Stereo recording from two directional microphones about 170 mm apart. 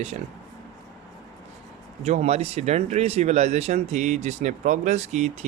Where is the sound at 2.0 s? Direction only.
40° right (ahead or behind).